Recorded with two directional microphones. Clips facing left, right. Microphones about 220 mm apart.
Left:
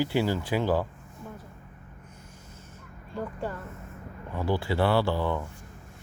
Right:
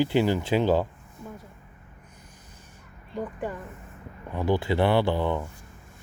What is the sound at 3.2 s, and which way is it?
Speech, 15° right (ahead or behind).